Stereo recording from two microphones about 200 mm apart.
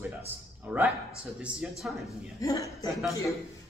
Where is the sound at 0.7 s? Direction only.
5° right (ahead or behind).